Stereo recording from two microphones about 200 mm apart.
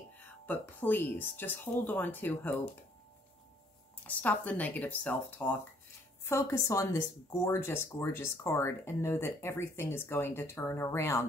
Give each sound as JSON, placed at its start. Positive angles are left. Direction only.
{"t": 0.5, "sound": "speech", "side_deg": 10}
{"t": 4.1, "sound": "speech", "side_deg": 5}